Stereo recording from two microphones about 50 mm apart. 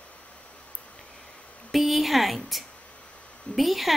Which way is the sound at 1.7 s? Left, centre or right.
Centre.